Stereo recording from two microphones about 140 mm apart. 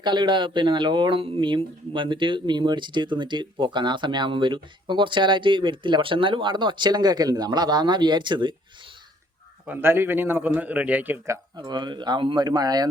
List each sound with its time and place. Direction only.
0.0 s speech: 35° right (ahead or behind)
9.6 s a man's voice: 15° right (ahead or behind)
11.5 s speech: 30° right (ahead or behind)